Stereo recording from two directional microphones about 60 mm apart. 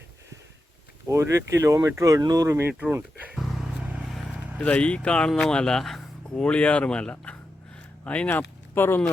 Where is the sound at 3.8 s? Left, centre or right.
Right.